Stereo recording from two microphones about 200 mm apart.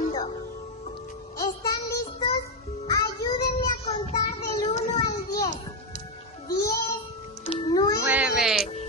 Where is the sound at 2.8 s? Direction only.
20° left (ahead or behind).